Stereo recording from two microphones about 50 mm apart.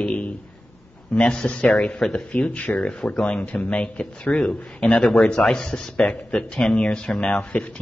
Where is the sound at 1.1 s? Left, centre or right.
Left.